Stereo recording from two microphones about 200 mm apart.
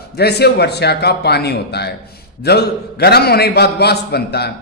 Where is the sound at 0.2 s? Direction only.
55° left (ahead or behind).